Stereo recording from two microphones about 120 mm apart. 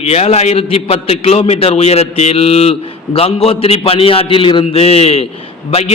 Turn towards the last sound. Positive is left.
turn(degrees=60)  # may be behind; listen again after turning